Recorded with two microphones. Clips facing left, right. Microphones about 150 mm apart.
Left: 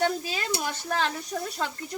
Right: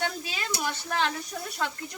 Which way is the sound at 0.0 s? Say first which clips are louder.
Left 5 dB; 35° left (ahead or behind).